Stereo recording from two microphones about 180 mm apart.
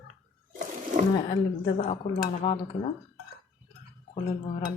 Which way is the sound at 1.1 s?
30° left (ahead or behind).